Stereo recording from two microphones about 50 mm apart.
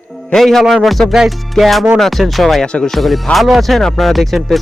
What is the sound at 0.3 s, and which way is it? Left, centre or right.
Speech, centre.